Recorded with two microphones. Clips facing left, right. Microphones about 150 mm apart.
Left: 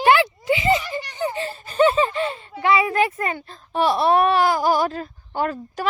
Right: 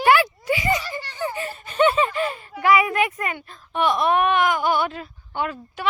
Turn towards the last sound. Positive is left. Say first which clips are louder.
# left 3 dB
turn(degrees=40)  # may be behind; listen again after turning